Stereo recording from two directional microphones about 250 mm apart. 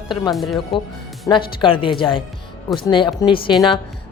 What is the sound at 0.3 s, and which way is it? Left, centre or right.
Speech, centre.